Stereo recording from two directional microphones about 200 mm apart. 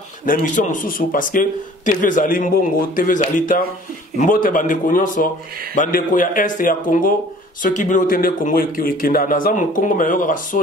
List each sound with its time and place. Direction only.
0.2 s a man's voice: 40° left (ahead or behind)